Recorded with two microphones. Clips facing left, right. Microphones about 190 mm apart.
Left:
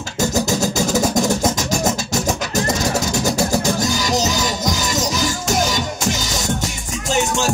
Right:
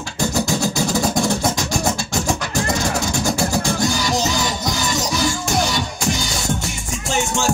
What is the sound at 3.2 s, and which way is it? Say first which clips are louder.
Music: left 2 dB; 40° left (ahead or behind).